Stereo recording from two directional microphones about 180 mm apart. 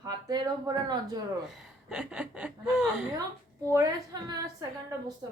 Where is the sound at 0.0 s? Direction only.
20° right (ahead or behind).